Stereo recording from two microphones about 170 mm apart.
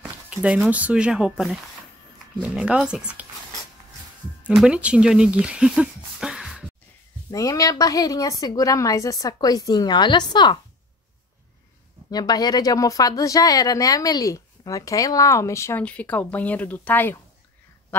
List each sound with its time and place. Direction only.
0.0 s speech: 5° right (ahead or behind)
4.5 s speech: 5° right (ahead or behind)
7.2 s speech: 20° left (ahead or behind)
12.1 s speech: 25° left (ahead or behind)